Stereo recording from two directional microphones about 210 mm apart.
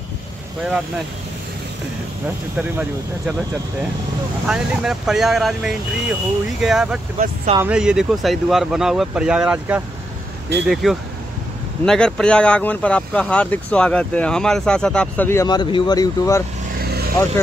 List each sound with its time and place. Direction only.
0.7 s speech: 5° right (ahead or behind)
2.5 s speech: 10° right (ahead or behind)
4.5 s speech: centre (ahead or behind); by 16.4 s 15° left (ahead or behind)
16.7 s vehicle: 50° right (ahead or behind)